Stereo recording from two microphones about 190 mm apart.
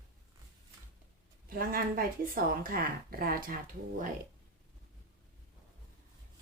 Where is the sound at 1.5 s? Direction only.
50° right (ahead or behind).